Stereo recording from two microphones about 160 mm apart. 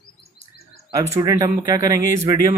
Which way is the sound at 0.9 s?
20° right (ahead or behind).